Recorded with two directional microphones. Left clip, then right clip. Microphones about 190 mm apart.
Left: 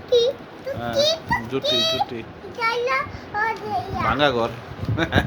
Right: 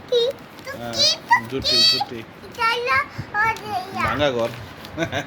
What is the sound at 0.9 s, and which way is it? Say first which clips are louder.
A child's voice: right 3 dB; 40° left (ahead or behind).